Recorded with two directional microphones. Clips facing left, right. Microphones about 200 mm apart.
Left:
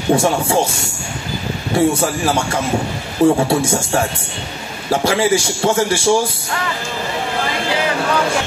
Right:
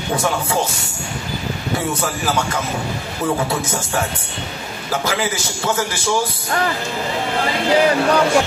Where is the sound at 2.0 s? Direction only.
30° left (ahead or behind).